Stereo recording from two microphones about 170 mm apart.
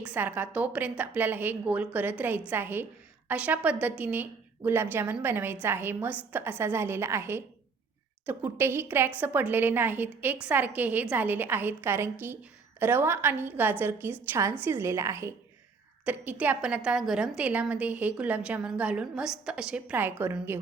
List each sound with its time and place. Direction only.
0.0 s a woman's voice: 10° right (ahead or behind)